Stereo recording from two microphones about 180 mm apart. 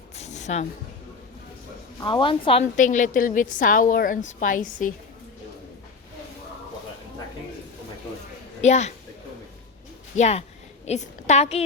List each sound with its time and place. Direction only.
0.2 s a sound: 40° left (ahead or behind)
2.0 s a woman's voice: 25° left (ahead or behind)
2.7 s a woman's voice: 45° left (ahead or behind)
8.6 s a woman's voice: 40° left (ahead or behind)
10.2 s a woman's voice: 35° left (ahead or behind)